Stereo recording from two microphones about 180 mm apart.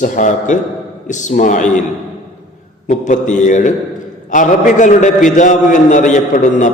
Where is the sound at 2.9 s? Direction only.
45° left (ahead or behind).